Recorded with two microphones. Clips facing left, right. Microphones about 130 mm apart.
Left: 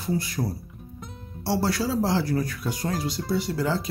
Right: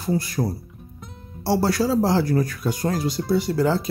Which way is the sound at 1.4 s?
45° right (ahead or behind).